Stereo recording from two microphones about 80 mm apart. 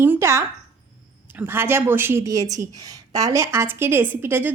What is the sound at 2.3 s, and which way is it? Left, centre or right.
A woman's voice, right.